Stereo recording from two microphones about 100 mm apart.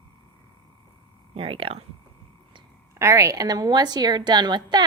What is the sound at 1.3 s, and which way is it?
Speech, 65° right (ahead or behind).